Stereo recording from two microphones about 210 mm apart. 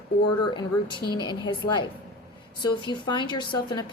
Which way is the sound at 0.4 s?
20° left (ahead or behind).